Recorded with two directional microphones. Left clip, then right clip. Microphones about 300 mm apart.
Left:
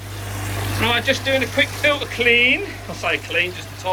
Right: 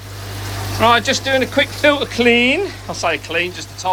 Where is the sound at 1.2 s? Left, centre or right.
Right.